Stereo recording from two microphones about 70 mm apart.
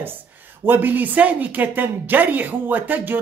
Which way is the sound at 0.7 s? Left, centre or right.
Right.